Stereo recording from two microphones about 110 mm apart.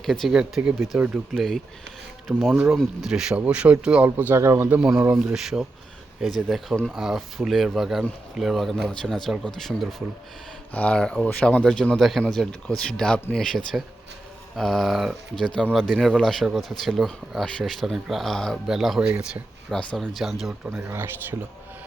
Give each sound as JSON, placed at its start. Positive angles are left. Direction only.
{"t": 0.0, "sound": "speech", "side_deg": 5}
{"t": 1.3, "sound": "speech", "side_deg": 0}
{"t": 4.8, "sound": "speech", "side_deg": -10}
{"t": 19.7, "sound": "speech", "side_deg": 5}
{"t": 20.7, "sound": "speech", "side_deg": -20}